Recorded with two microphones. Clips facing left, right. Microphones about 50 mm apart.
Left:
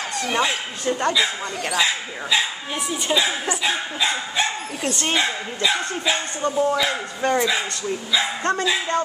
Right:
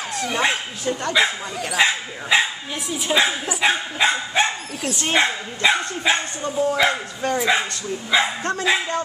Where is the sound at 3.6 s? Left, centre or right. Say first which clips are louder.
Right 4 dB; right.